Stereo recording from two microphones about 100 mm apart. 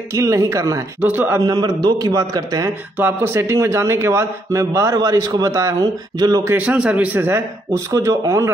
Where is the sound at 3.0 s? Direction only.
20° right (ahead or behind); by 6.4 s 40° right (ahead or behind).